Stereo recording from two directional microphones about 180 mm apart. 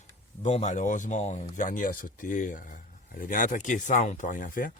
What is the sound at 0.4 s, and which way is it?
Speech, 40° left (ahead or behind).